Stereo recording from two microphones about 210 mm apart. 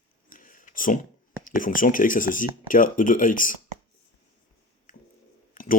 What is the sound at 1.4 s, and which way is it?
Speech, 40° left (ahead or behind).